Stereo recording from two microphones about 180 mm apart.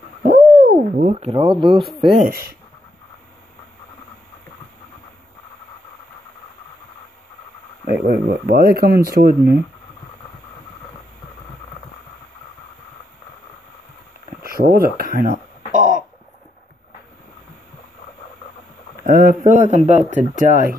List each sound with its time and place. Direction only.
0.2 s owl: 50° right (ahead or behind)
1.1 s speech: 30° right (ahead or behind)
2.1 s a man's voice: 50° right (ahead or behind)
7.8 s speech: 55° right (ahead or behind)
14.5 s speech: 55° right (ahead or behind)
19.0 s a man's voice: 55° right (ahead or behind)